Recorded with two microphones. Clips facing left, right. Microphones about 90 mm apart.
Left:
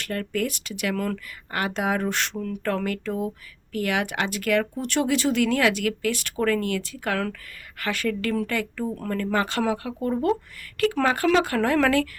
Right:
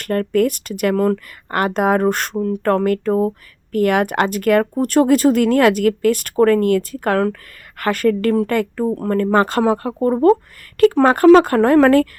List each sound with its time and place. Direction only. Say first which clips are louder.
0.0 s a woman's voice: right 10 dB; 50° right (ahead or behind)